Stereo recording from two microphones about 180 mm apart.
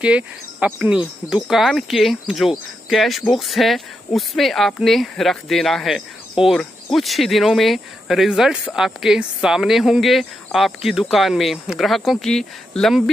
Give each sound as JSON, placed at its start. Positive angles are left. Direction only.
{"t": 0.0, "sound": "speech", "side_deg": -5}